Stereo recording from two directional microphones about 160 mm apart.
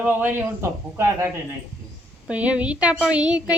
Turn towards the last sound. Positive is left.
turn(degrees=-5)  # may be behind; listen again after turning